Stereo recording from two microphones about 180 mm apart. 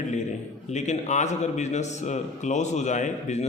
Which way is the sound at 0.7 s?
40° left (ahead or behind).